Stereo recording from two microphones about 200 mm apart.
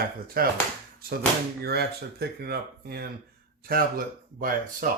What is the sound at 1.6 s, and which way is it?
Speech, 50° right (ahead or behind).